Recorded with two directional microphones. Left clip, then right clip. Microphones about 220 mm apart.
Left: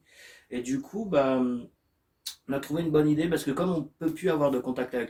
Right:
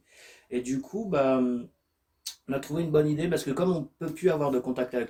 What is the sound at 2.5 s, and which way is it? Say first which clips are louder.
Speech: even; 10° right (ahead or behind).